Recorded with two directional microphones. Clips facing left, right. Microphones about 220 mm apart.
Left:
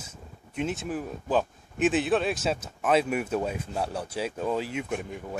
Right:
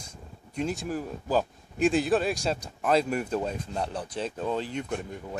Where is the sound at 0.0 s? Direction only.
5° left (ahead or behind).